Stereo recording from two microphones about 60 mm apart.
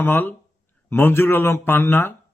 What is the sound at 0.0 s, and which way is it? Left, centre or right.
Speech, left.